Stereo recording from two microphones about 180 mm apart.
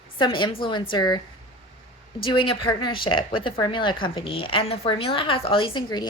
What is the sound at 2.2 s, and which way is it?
Speech, 30° left (ahead or behind).